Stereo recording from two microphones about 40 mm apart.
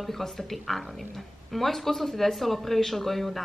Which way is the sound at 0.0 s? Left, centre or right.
Centre.